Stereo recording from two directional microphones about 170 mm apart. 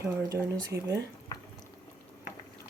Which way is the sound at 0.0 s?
15° right (ahead or behind).